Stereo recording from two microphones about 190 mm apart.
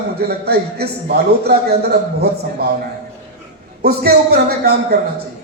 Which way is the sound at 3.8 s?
55° right (ahead or behind).